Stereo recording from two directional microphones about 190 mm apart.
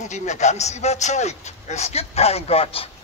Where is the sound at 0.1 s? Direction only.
40° left (ahead or behind).